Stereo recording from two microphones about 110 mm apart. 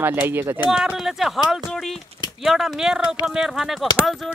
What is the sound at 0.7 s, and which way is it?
Speech, 5° right (ahead or behind).